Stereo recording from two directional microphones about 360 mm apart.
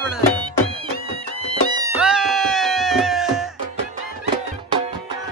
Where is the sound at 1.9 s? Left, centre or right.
Centre.